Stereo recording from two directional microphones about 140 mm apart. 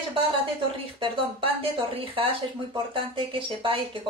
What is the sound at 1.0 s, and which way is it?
Speech, 40° right (ahead or behind).